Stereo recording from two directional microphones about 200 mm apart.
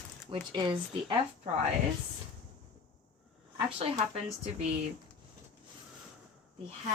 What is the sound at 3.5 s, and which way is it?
Speech, 30° right (ahead or behind).